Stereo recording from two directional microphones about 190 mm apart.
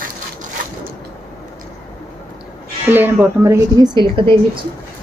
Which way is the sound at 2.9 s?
10° right (ahead or behind).